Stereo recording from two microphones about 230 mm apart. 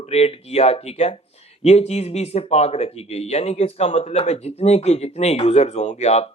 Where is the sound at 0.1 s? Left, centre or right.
Left.